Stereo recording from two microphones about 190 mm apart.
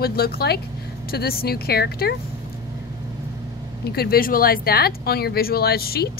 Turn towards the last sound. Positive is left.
turn(degrees=55)  # may be behind; listen again after turning